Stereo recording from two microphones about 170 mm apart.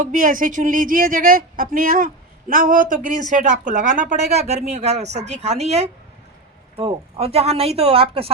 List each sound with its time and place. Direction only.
0.0 s speech: 50° right (ahead or behind); by 8.3 s 35° right (ahead or behind)